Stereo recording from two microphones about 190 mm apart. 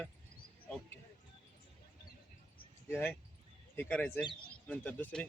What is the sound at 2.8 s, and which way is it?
A man's voice, 10° left (ahead or behind).